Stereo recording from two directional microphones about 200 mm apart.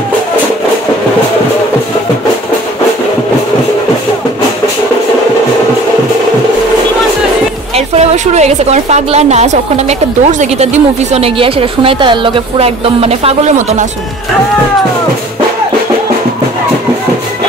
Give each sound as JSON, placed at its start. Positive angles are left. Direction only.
{"t": 7.7, "sound": "a woman's voice", "side_deg": -30}